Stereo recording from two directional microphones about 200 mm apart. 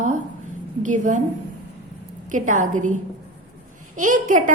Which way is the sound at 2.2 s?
40° right (ahead or behind).